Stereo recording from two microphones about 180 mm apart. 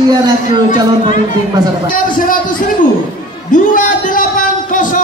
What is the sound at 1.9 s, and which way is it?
Speech, 50° left (ahead or behind).